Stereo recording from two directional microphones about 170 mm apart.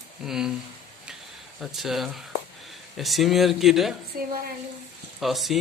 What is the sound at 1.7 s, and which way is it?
Speech, centre (ahead or behind).